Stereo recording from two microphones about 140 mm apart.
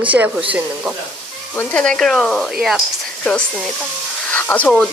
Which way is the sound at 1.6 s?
5° left (ahead or behind).